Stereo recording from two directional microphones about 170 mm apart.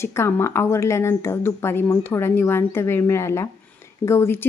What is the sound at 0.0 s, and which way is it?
Speech, 15° left (ahead or behind).